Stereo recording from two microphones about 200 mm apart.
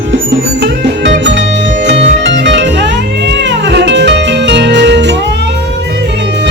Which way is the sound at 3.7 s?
60° right (ahead or behind).